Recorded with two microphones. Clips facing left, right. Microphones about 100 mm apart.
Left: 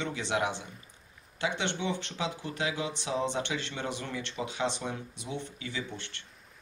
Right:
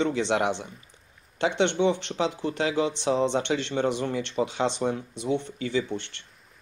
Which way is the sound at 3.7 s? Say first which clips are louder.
Right 10 dB; 50° right (ahead or behind).